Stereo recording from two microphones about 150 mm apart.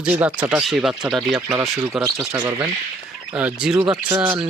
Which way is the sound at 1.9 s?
5° right (ahead or behind).